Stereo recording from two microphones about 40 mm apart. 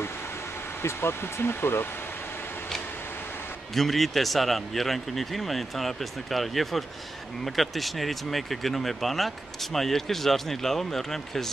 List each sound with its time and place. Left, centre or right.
1.0 s speech: left
3.7 s speech: centre